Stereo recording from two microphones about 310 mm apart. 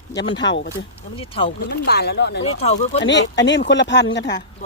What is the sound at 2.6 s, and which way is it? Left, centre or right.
Speech, left.